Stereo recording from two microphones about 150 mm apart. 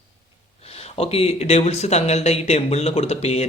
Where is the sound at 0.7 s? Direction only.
45° left (ahead or behind).